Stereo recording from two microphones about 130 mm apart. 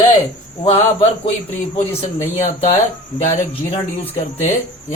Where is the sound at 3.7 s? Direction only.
50° left (ahead or behind).